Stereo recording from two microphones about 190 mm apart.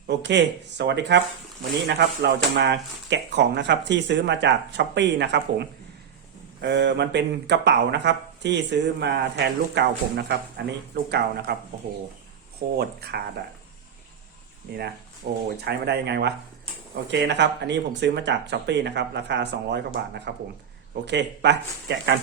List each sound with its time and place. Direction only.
0.2 s speech: 65° right (ahead or behind)
12.7 s speech: 55° right (ahead or behind)
14.7 s speech: 60° right (ahead or behind)